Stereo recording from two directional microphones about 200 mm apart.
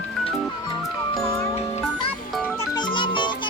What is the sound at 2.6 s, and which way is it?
Music, 20° left (ahead or behind).